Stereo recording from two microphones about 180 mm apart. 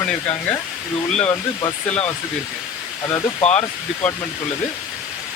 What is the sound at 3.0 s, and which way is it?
Speech, 20° left (ahead or behind).